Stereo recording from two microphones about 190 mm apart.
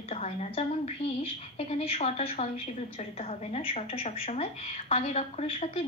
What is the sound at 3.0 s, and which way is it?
Speech, 35° left (ahead or behind).